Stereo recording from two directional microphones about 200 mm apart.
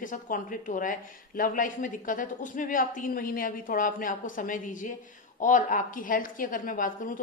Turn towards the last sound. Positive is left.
turn(degrees=45)  # may be behind; listen again after turning